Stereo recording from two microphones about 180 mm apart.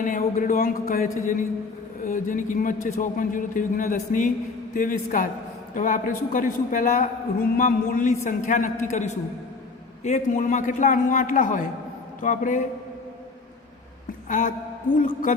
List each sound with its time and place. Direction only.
0.0 s a man's voice: 45° left (ahead or behind)
14.3 s a man's voice: 45° left (ahead or behind)